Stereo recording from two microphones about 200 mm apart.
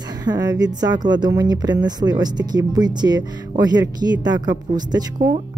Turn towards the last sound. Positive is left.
turn(degrees=-20)  # may be behind; listen again after turning